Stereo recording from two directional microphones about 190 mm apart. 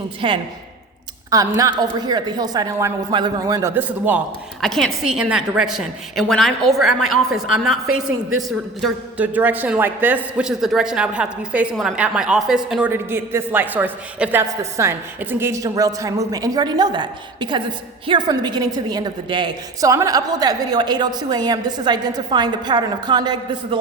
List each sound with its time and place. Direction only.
0.2 s a woman's voice: 25° right (ahead or behind); by 4.2 s 10° right (ahead or behind)
4.6 s a woman's voice: centre (ahead or behind); by 23.4 s 20° right (ahead or behind)